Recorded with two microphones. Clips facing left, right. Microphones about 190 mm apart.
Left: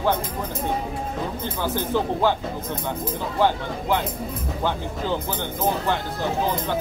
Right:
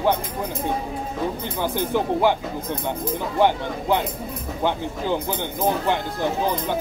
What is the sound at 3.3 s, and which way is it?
Speech, 15° right (ahead or behind).